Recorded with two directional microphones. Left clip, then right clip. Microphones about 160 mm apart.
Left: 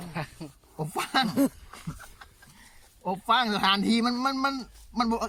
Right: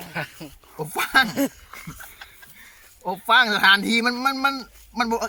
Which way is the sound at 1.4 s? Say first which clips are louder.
Right 2 dB; 90° left.